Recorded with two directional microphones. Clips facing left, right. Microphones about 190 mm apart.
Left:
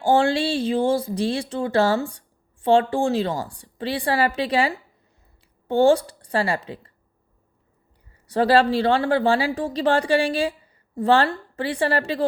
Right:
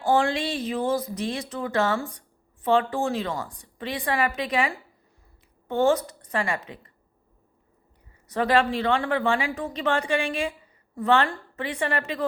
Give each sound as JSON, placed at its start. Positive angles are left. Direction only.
{"t": 0.0, "sound": "speech", "side_deg": 30}
{"t": 8.3, "sound": "speech", "side_deg": 30}